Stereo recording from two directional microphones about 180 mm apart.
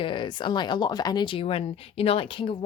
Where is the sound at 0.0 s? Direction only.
25° left (ahead or behind).